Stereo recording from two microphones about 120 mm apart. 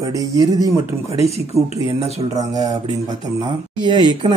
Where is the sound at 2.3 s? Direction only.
30° right (ahead or behind).